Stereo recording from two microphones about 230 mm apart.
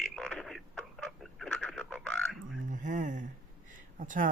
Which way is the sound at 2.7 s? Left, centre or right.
Right.